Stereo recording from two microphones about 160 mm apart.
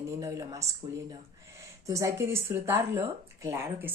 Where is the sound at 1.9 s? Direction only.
20° right (ahead or behind).